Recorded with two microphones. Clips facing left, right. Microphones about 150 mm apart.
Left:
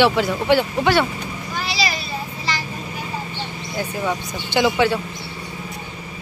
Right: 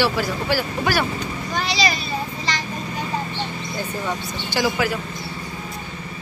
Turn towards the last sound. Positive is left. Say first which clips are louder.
# left 4 dB
turn(degrees=30)  # may be behind; listen again after turning